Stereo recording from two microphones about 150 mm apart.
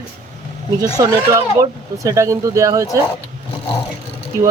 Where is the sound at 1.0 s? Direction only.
20° right (ahead or behind).